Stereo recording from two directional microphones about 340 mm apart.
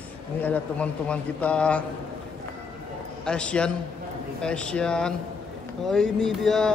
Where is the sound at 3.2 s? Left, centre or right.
Centre.